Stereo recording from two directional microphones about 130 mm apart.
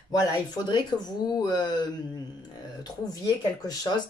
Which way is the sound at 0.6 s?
35° left (ahead or behind).